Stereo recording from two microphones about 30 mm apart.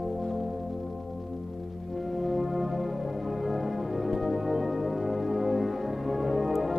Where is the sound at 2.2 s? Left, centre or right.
Centre.